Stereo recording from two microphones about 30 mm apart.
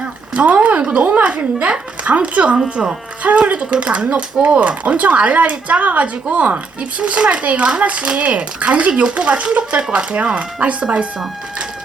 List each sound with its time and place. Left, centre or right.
0.3 s a sound: right
0.8 s a woman's voice: right
1.0 s speech: right
4.4 s speech: centre
4.9 s speech: right
7.0 s speech: right